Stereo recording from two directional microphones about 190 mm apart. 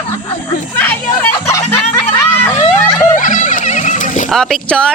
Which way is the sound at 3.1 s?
40° left (ahead or behind).